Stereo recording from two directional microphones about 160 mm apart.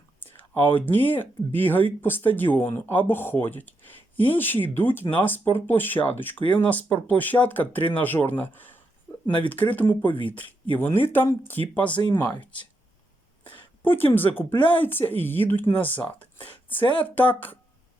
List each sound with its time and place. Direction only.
0.3 s a sound: 10° left (ahead or behind)
0.8 s speech: 10° left (ahead or behind)
9.1 s a sound: 20° left (ahead or behind)
9.4 s speech: 10° left (ahead or behind)
10.0 s speech: 30° left (ahead or behind)
10.8 s speech: 15° left (ahead or behind)
13.8 s speech: 10° left (ahead or behind)
16.5 s a sound: 10° left (ahead or behind)
17.0 s speech: 10° left (ahead or behind)